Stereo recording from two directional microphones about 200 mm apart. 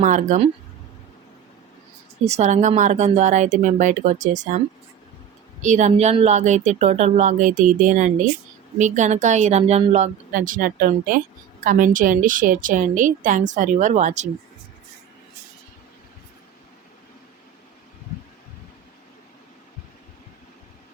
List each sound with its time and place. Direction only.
0.0 s a woman's voice: 40° right (ahead or behind)
2.2 s a woman's voice: 35° right (ahead or behind)
5.6 s a woman's voice: 35° right (ahead or behind)